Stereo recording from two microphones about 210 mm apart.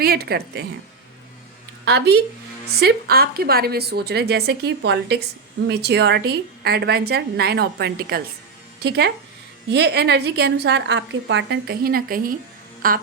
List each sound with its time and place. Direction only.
0.0 s a woman's voice: 50° right (ahead or behind)
1.8 s a woman's voice: 55° right (ahead or behind)